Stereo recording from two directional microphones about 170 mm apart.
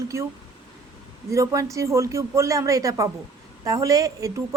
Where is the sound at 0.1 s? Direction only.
15° right (ahead or behind).